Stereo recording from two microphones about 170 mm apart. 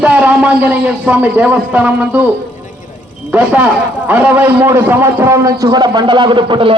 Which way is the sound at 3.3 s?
10° right (ahead or behind).